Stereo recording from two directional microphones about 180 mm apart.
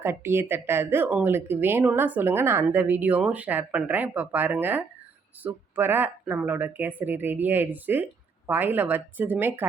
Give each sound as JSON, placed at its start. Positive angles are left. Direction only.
{"t": 0.0, "sound": "speech", "side_deg": -15}